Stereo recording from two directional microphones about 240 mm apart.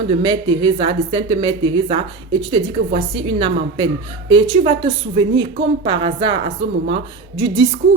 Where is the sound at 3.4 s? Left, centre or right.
Centre.